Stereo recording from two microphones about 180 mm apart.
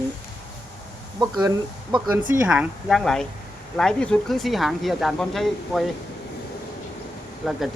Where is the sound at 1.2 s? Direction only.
20° right (ahead or behind).